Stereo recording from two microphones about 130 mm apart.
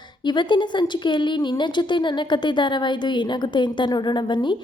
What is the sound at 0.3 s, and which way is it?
A woman's voice, 35° left (ahead or behind).